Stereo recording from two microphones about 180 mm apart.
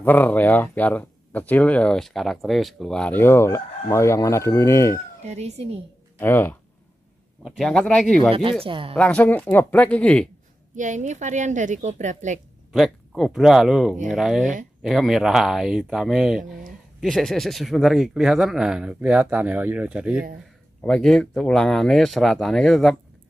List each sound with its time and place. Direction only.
0.0 s speech: 10° left (ahead or behind)
5.2 s speech: 40° right (ahead or behind)
6.1 s speech: 10° left (ahead or behind)
8.3 s speech: 30° right (ahead or behind)
8.9 s speech: 10° left (ahead or behind)
10.8 s a woman's voice: 45° right (ahead or behind)
12.7 s speech: centre (ahead or behind)